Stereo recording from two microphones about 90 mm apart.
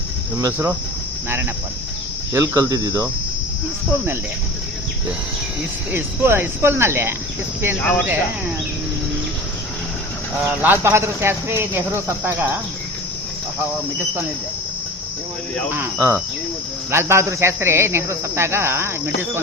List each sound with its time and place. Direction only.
0.3 s speech: 35° right (ahead or behind)
2.3 s speech: 30° right (ahead or behind)
5.9 s speech: 25° right (ahead or behind)
7.8 s speech: 15° left (ahead or behind)
8.0 s speech: 15° right (ahead or behind)
10.4 s speech: 20° right (ahead or behind)
15.7 s speech: 25° right (ahead or behind)